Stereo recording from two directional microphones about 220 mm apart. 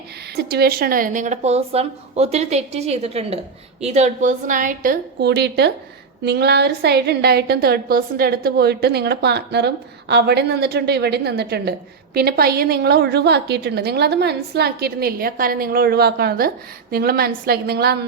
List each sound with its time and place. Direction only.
0.3 s a woman's voice: 45° right (ahead or behind)